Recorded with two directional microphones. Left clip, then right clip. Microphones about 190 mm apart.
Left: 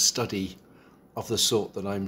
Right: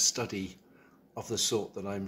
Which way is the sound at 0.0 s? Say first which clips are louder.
Left 5 dB; 5° left (ahead or behind).